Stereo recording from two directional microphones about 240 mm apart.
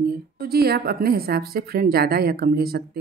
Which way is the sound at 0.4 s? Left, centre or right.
Right.